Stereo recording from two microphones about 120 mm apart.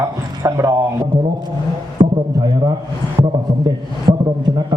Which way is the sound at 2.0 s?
90° right.